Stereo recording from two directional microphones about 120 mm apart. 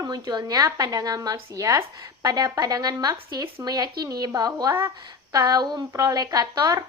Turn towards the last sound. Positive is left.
turn(degrees=-30)  # may be behind; listen again after turning